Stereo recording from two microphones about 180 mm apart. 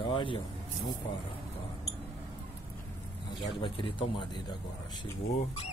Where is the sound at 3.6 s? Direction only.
25° left (ahead or behind).